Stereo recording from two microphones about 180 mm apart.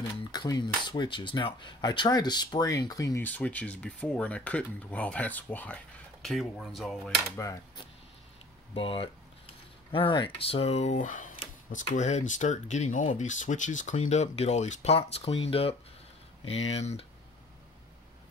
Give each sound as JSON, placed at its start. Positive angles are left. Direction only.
{"t": 0.3, "sound": "cutlery", "side_deg": 25}
{"t": 6.2, "sound": "speech", "side_deg": 0}
{"t": 7.3, "sound": "a sound", "side_deg": 15}
{"t": 8.7, "sound": "cutlery", "side_deg": 30}
{"t": 9.9, "sound": "speech", "side_deg": 30}